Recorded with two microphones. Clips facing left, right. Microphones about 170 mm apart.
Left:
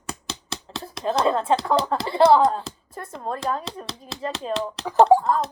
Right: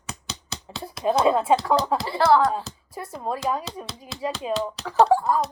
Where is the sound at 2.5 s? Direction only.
10° right (ahead or behind).